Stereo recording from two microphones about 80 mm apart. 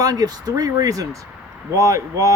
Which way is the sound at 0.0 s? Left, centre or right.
Right.